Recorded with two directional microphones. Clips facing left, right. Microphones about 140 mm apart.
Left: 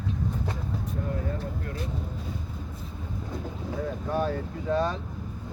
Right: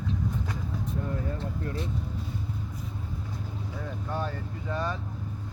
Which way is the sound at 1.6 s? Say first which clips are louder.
Right 2 dB; 25° right (ahead or behind).